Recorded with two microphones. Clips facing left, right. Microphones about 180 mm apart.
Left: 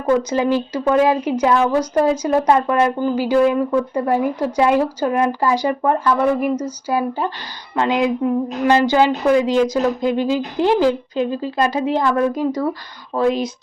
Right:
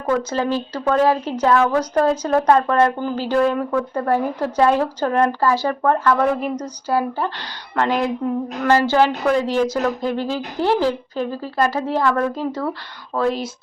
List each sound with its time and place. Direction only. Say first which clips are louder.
0.2 s speech: left 3 dB; 15° left (ahead or behind)